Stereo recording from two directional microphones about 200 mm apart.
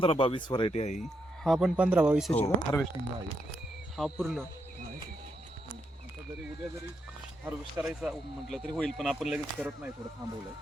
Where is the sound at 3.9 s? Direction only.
5° right (ahead or behind).